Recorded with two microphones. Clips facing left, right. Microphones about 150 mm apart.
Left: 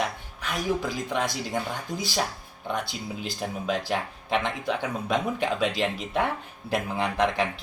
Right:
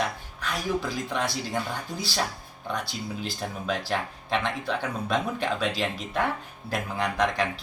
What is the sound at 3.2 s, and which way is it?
Speech, 20° left (ahead or behind).